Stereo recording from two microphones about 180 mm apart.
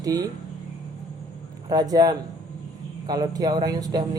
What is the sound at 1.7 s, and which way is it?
Speech, 20° right (ahead or behind).